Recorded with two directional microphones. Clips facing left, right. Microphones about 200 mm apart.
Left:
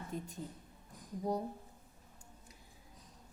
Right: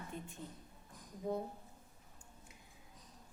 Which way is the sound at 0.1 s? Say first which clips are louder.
Left 6 dB; 40° left (ahead or behind).